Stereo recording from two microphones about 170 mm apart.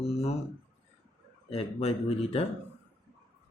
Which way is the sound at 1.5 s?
35° left (ahead or behind).